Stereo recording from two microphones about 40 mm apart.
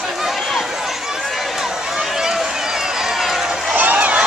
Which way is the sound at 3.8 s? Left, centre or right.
Right.